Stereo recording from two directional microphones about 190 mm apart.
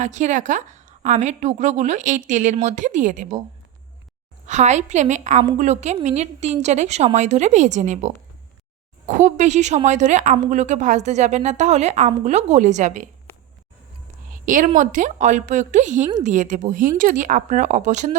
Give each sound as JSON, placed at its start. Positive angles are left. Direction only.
{"t": 0.0, "sound": "a woman's voice", "side_deg": -40}
{"t": 4.4, "sound": "a woman's voice", "side_deg": -35}
{"t": 14.4, "sound": "a woman's voice", "side_deg": -45}